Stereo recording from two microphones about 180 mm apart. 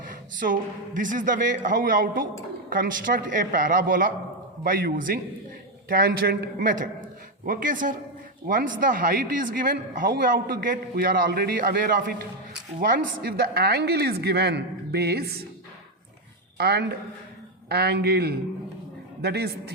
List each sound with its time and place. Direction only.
0.3 s a woman's voice: 45° right (ahead or behind)
7.4 s a woman's voice: 50° right (ahead or behind)
16.6 s a woman's voice: 65° right (ahead or behind)